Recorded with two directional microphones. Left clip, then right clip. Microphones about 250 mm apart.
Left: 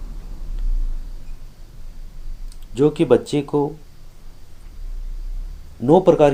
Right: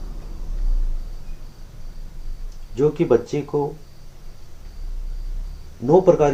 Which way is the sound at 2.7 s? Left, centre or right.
Left.